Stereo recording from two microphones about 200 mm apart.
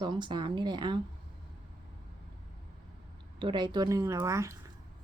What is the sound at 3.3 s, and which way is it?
A woman's voice, 25° right (ahead or behind).